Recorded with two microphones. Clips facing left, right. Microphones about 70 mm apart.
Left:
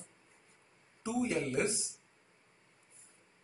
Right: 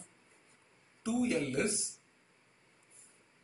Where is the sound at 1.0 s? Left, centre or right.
Left.